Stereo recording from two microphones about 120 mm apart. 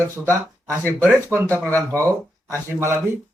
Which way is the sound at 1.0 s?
15° right (ahead or behind).